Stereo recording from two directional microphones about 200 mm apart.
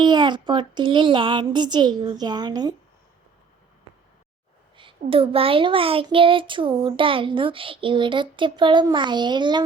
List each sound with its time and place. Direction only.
0.0 s speech: 20° right (ahead or behind)
4.8 s speech: 25° right (ahead or behind)